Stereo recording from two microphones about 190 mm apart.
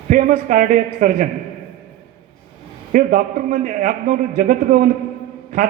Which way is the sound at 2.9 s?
45° right (ahead or behind).